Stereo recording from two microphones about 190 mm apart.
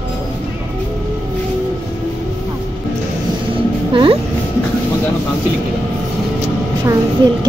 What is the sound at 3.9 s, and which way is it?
Speech, 25° right (ahead or behind).